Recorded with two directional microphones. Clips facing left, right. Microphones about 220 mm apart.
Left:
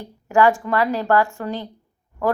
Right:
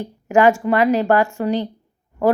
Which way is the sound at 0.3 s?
20° right (ahead or behind).